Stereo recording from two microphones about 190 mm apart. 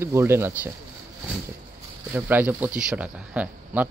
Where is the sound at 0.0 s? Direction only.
15° right (ahead or behind).